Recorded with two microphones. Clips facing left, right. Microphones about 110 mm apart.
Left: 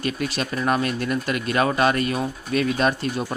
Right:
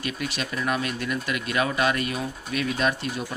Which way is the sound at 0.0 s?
40° left (ahead or behind).